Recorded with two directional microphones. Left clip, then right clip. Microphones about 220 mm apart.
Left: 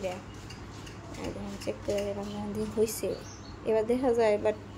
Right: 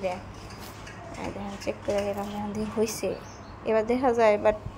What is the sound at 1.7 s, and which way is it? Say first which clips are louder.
A woman's voice: right 4 dB; 10° right (ahead or behind).